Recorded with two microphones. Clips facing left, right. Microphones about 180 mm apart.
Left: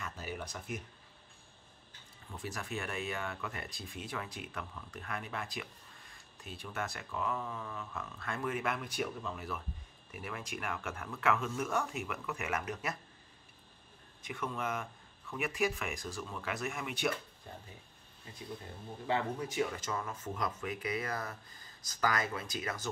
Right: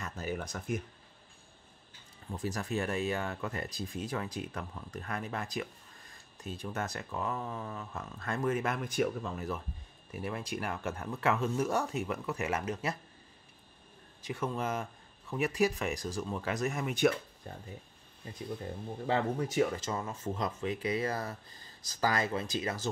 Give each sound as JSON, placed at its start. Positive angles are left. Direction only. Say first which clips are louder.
{"t": 0.0, "sound": "a sound", "louder": "right 5 dB", "side_deg": -45}
{"t": 2.3, "sound": "speech", "louder": "right 6 dB", "side_deg": -40}
{"t": 10.1, "sound": "speech", "louder": "right 5 dB", "side_deg": -30}
{"t": 14.2, "sound": "speech", "louder": "right 4 dB", "side_deg": -35}
{"t": 19.0, "sound": "speech", "louder": "right 3 dB", "side_deg": -40}
{"t": 19.8, "sound": "speech", "louder": "right 3 dB", "side_deg": -25}